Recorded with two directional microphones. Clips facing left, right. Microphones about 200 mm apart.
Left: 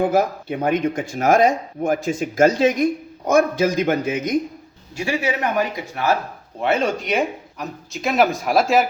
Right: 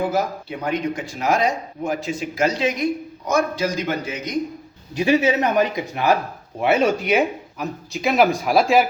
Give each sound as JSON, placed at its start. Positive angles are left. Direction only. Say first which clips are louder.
{"t": 0.0, "sound": "speech", "louder": "left 4 dB", "side_deg": 50}
{"t": 4.9, "sound": "speech", "louder": "right 5 dB", "side_deg": -20}